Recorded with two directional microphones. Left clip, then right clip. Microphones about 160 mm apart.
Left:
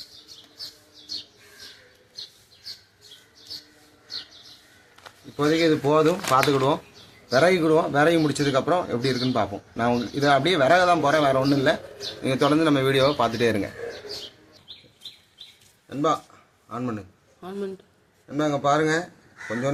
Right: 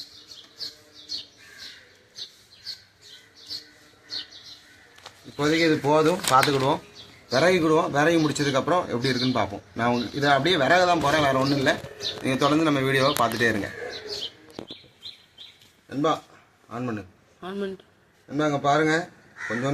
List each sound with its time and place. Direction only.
5.4 s a man's voice: 25° left (ahead or behind)
7.3 s a man's voice: 30° left (ahead or behind)
15.9 s speech: 5° right (ahead or behind)
17.4 s speech: 5° left (ahead or behind)